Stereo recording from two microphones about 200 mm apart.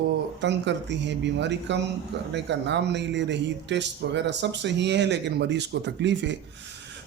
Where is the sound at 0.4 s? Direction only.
60° right (ahead or behind).